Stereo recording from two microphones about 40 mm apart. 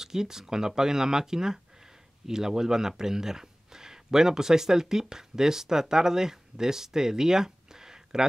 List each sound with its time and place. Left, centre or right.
0.0 s speech: centre